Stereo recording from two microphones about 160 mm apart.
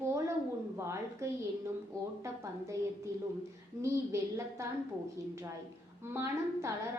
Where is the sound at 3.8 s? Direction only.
20° right (ahead or behind).